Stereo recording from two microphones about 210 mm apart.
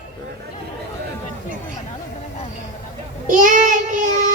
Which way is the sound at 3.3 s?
40° right (ahead or behind).